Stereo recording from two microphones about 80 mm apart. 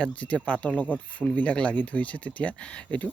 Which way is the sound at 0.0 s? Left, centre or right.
Centre.